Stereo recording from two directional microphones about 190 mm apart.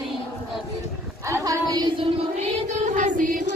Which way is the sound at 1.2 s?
15° right (ahead or behind).